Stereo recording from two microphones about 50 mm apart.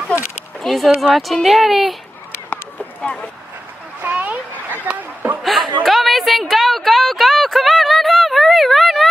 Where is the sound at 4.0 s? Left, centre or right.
Right.